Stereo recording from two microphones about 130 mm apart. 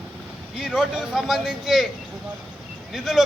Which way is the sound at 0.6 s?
5° right (ahead or behind).